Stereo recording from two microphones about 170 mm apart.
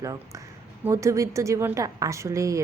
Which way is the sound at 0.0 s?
20° right (ahead or behind).